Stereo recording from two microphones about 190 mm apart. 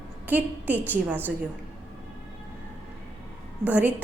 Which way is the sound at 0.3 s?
10° right (ahead or behind).